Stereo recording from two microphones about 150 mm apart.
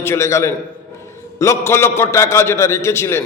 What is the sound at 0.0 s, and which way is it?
A man's voice, 15° left (ahead or behind).